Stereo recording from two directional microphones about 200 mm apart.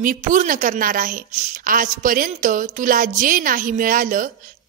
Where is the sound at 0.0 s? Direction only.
40° right (ahead or behind).